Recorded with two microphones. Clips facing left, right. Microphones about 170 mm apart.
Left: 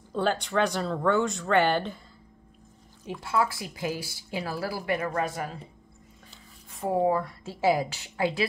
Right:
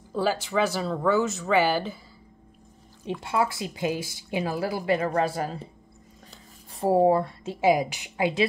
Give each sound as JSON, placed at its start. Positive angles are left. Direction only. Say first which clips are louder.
{"t": 0.1, "sound": "speech", "louder": "right 1 dB", "side_deg": -5}
{"t": 3.2, "sound": "speech", "louder": "right 1 dB", "side_deg": -20}
{"t": 6.7, "sound": "speech", "louder": "right 5 dB", "side_deg": -35}